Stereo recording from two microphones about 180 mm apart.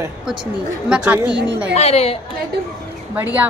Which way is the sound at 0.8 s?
5° right (ahead or behind).